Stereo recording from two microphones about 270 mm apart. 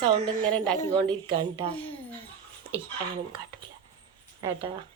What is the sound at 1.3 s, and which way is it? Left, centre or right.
Speech, centre.